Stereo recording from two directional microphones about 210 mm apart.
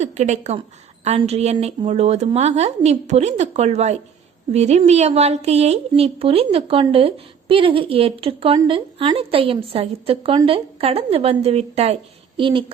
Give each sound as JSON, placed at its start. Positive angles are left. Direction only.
{"t": 0.0, "sound": "a woman's voice", "side_deg": -35}